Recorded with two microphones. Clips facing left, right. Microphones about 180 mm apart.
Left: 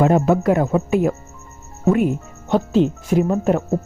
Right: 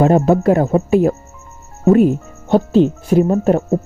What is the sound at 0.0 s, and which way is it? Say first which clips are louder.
Speech: right 3 dB; 30° right (ahead or behind).